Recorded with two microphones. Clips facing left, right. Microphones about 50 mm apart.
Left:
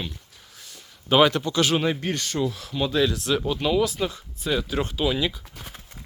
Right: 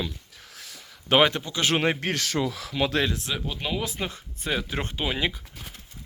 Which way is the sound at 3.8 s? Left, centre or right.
Right.